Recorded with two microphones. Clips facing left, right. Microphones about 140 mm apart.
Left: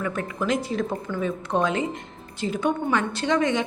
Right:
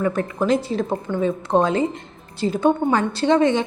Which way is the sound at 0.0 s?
35° right (ahead or behind).